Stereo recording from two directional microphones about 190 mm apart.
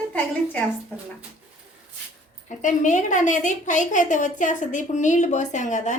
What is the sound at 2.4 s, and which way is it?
A woman's voice, 40° left (ahead or behind).